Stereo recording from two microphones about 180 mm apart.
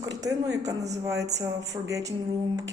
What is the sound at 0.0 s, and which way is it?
Speech, 20° right (ahead or behind).